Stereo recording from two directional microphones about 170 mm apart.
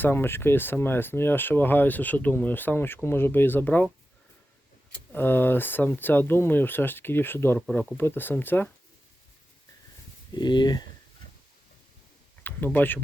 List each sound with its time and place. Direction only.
0.0 s speech: 15° left (ahead or behind)
5.1 s speech: 10° left (ahead or behind)
10.3 s speech: 25° left (ahead or behind)
12.4 s speech: 10° left (ahead or behind)